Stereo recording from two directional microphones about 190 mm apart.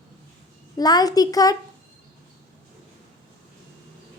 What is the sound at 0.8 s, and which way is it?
Speech, 20° left (ahead or behind).